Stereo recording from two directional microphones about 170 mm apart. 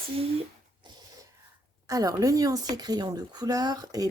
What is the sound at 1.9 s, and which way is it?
A woman's voice, 20° right (ahead or behind).